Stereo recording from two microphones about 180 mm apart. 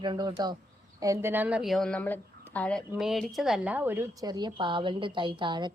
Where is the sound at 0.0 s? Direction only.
25° right (ahead or behind).